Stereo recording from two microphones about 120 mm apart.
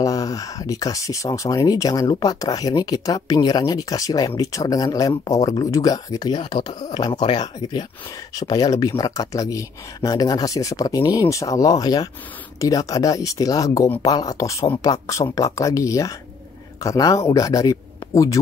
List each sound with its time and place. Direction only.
0.0 s speech: 30° left (ahead or behind)